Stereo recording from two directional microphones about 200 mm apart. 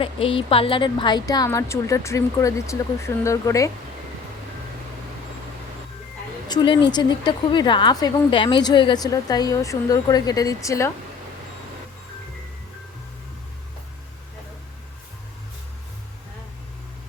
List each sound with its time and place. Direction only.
0.0 s a woman's voice: 25° left (ahead or behind)
6.5 s a woman's voice: 25° left (ahead or behind)